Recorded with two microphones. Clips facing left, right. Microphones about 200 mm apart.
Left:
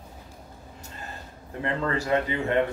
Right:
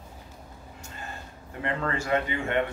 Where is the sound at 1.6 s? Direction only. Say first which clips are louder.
Left 2 dB; 35° left (ahead or behind).